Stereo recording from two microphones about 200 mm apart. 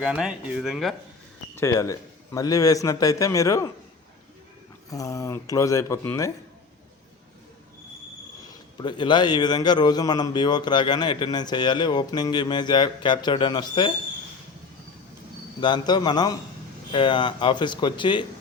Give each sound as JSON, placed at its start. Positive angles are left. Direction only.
{"t": 0.0, "sound": "speech", "side_deg": 0}
{"t": 1.5, "sound": "a man's voice", "side_deg": 15}
{"t": 4.9, "sound": "a man's voice", "side_deg": 15}
{"t": 8.8, "sound": "speech", "side_deg": 20}
{"t": 15.6, "sound": "speech", "side_deg": 20}